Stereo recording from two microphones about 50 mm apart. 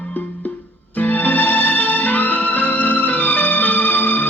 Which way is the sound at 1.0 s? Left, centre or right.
Left.